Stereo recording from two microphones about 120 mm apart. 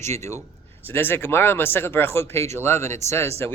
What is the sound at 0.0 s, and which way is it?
A man's voice, 25° left (ahead or behind).